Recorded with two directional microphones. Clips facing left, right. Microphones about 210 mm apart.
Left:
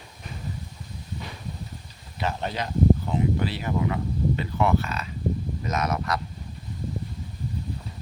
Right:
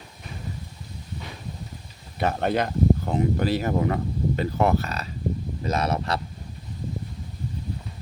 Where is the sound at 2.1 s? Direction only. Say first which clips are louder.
Right 6 dB; 55° right (ahead or behind); by 6.1 s 30° right (ahead or behind).